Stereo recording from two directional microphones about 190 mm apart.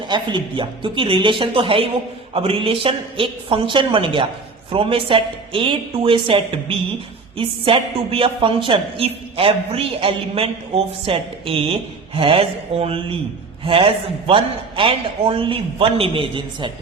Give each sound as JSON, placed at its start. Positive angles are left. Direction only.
{"t": 0.1, "sound": "a woman's voice", "side_deg": -25}